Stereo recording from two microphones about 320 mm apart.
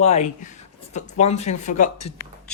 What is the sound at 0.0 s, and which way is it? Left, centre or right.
Speech, left.